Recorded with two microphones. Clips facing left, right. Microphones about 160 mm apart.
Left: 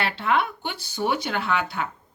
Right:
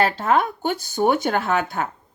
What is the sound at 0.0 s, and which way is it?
Speech, 45° right (ahead or behind).